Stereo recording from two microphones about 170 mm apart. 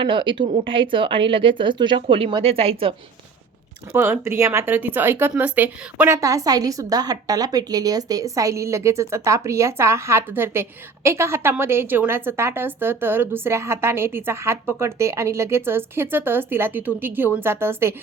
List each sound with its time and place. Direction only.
0.0 s a woman's voice: 30° right (ahead or behind)
3.9 s speech: 15° right (ahead or behind)